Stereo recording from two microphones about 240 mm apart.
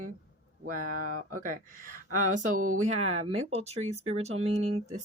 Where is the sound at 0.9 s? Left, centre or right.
Right.